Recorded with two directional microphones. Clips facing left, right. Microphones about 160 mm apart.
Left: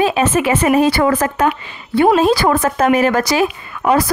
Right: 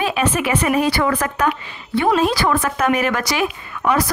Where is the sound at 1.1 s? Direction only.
40° left (ahead or behind).